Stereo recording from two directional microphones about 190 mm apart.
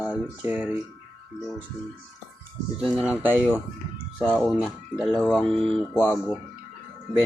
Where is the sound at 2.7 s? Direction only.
5° right (ahead or behind).